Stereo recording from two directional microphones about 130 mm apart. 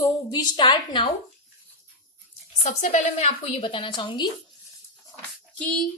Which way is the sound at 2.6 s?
60° left (ahead or behind).